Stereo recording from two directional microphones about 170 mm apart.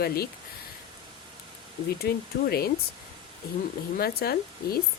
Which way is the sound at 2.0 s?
65° left (ahead or behind).